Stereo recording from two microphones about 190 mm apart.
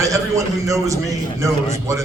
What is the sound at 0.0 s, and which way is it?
Speech, 15° right (ahead or behind).